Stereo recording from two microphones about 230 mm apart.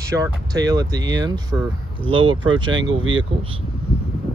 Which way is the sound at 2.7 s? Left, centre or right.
Right.